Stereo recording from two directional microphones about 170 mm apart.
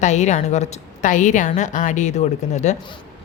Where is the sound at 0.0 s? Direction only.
45° left (ahead or behind).